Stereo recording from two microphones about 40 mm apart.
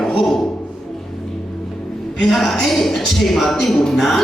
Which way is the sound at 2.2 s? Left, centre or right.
Centre.